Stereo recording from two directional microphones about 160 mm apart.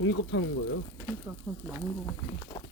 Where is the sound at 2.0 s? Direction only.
20° left (ahead or behind).